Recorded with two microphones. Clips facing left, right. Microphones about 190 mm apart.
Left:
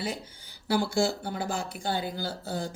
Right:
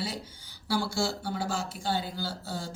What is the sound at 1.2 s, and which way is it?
Speech, 55° left (ahead or behind).